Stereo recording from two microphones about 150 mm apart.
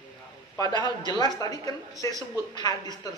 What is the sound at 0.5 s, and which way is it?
Speech, 25° left (ahead or behind).